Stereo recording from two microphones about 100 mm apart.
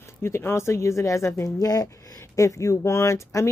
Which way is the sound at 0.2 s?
25° left (ahead or behind).